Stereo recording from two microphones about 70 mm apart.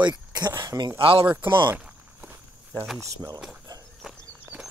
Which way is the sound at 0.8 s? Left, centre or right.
Right.